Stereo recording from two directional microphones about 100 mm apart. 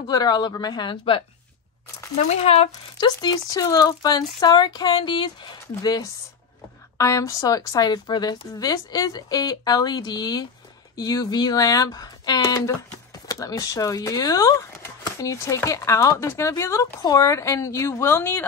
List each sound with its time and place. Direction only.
0.0 s speech: 45° left (ahead or behind)
2.2 s speech: 90° left
3.0 s a woman's voice: 45° left (ahead or behind); by 18.5 s 20° left (ahead or behind)